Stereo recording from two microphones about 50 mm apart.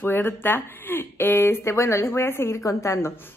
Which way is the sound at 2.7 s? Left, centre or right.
Left.